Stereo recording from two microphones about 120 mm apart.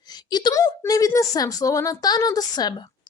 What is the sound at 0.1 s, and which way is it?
A woman's voice, 35° left (ahead or behind).